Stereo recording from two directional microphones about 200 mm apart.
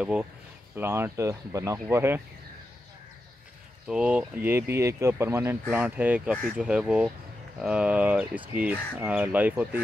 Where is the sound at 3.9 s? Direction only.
5° right (ahead or behind).